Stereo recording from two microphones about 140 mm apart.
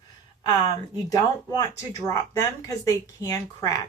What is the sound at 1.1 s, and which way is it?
Speech, 25° left (ahead or behind).